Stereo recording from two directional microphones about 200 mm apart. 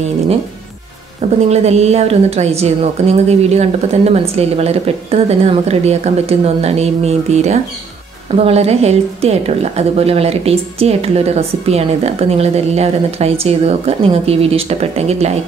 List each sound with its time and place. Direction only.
1.5 s a woman's voice: 35° right (ahead or behind)